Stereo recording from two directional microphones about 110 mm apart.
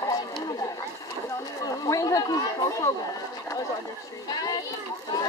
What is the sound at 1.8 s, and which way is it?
Speech, 30° left (ahead or behind).